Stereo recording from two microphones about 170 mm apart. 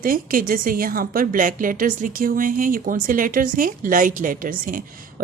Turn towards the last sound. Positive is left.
turn(degrees=-55)  # may be behind; listen again after turning